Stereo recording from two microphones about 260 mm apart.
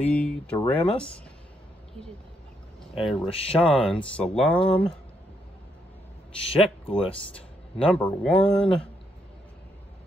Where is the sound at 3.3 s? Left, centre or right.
Left.